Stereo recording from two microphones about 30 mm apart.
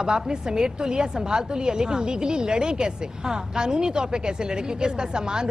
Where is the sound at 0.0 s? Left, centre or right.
Right.